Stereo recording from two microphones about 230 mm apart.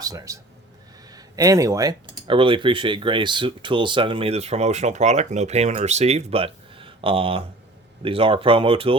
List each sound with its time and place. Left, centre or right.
0.0 s a man's voice: centre